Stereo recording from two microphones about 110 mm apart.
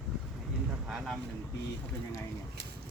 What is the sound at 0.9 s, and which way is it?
Vehicle, 5° right (ahead or behind).